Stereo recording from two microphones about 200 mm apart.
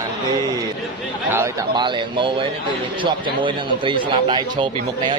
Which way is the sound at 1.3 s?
15° right (ahead or behind).